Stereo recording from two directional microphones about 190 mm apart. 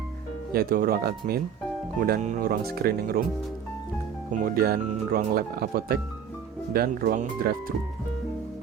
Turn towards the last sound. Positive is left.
turn(degrees=-50)  # may be behind; listen again after turning